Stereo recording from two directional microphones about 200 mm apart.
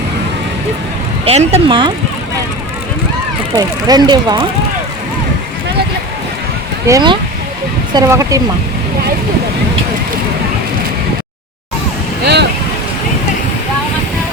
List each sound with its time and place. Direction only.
1.2 s speech: 30° right (ahead or behind)
3.6 s speech: 20° right (ahead or behind)
6.8 s speech: 20° right (ahead or behind)
12.2 s boat: 55° right (ahead or behind)